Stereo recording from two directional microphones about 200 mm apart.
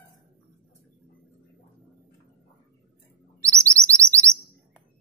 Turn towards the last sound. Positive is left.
turn(degrees=-15)  # may be behind; listen again after turning